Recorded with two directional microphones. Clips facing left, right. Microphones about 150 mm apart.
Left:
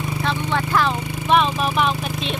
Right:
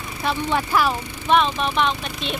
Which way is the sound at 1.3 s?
5° left (ahead or behind).